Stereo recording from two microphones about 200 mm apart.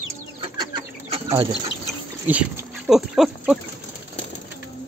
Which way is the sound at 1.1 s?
30° right (ahead or behind).